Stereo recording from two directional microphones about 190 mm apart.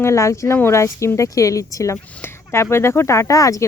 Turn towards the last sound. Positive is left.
turn(degrees=15)  # may be behind; listen again after turning